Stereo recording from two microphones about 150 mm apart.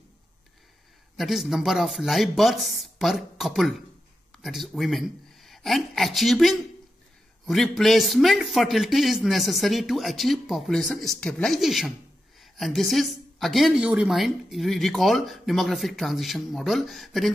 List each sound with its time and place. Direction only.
1.1 s a woman's voice: centre (ahead or behind)